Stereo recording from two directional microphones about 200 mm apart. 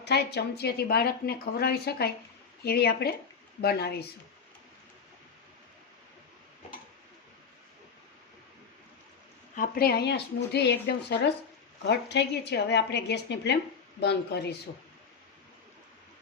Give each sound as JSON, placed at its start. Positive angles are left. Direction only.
{"t": 0.0, "sound": "a woman's voice", "side_deg": 55}
{"t": 9.6, "sound": "speech", "side_deg": 50}